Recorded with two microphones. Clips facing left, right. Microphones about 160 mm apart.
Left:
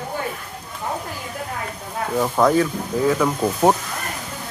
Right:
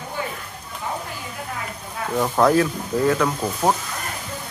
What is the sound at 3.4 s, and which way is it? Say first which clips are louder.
Speech: left 4 dB; 20° left (ahead or behind).